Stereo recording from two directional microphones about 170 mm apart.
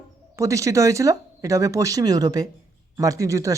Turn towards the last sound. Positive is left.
turn(degrees=-20)  # may be behind; listen again after turning